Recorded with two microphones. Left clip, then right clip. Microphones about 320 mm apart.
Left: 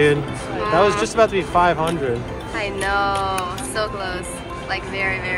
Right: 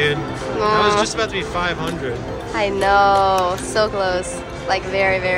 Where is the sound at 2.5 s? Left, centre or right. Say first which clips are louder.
Right 6 dB; centre.